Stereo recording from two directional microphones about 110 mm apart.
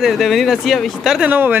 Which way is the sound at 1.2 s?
15° right (ahead or behind).